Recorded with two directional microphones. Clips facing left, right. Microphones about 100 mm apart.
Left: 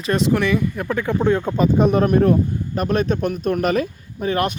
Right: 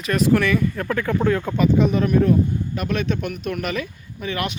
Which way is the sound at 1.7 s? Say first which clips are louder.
Left 4 dB; 45° left (ahead or behind).